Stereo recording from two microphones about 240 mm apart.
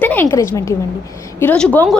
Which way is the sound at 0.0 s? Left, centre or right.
Centre.